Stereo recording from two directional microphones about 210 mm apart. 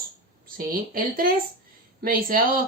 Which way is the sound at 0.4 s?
40° right (ahead or behind).